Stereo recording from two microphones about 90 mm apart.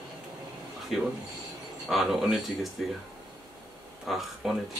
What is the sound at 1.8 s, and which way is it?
Speech, centre (ahead or behind).